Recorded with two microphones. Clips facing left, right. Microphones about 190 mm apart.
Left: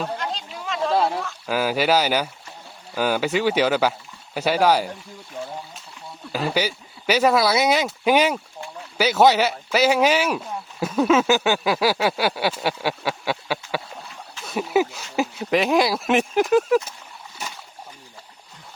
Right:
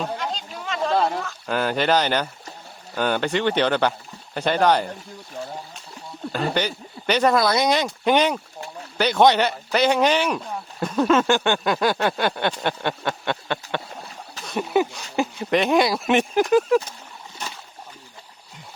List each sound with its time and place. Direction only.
0.0 s a sound: centre (ahead or behind)
2.9 s speech: 5° left (ahead or behind)
6.3 s speech: 5° left (ahead or behind)
17.4 s splash: 10° left (ahead or behind)